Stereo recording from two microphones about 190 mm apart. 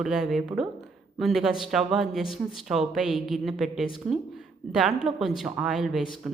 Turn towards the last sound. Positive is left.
turn(degrees=0)  # may be behind; listen again after turning